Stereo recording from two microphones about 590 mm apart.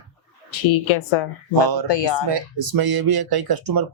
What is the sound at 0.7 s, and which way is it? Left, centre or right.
Speech, left.